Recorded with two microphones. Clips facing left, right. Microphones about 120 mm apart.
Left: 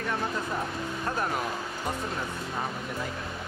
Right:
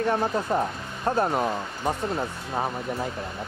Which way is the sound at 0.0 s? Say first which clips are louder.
Right 6 dB; 35° right (ahead or behind).